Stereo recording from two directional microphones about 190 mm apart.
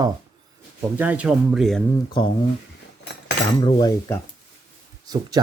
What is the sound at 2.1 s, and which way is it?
Speech, 25° left (ahead or behind).